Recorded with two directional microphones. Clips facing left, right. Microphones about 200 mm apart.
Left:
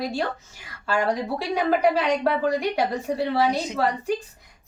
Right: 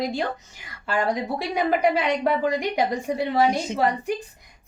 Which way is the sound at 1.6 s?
15° right (ahead or behind).